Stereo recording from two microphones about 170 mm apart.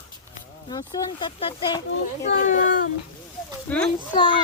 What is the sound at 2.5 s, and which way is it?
Speech, 55° left (ahead or behind).